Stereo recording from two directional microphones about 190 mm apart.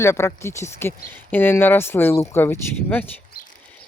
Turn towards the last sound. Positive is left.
turn(degrees=10)  # may be behind; listen again after turning